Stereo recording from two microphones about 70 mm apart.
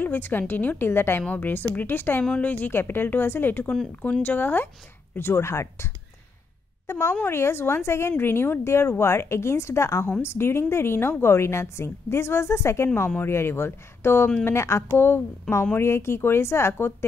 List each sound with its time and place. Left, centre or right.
0.0 s a woman's voice: left
15.0 s a woman's voice: left